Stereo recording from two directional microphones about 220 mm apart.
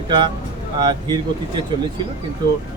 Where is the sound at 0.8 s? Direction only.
20° right (ahead or behind).